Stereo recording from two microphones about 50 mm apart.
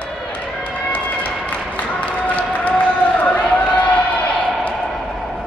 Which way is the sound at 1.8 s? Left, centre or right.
Left.